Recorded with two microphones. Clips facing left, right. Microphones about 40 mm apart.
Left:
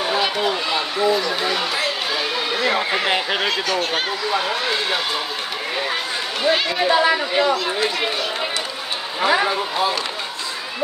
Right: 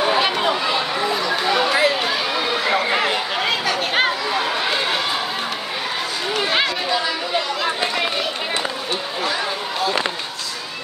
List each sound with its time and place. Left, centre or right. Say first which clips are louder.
0.0 s a sound: right 2 dB; centre
2.6 s run: even; centre
3.4 s speech: even; centre
6.8 s speech: left 5 dB; centre
9.2 s speech: left 9 dB; left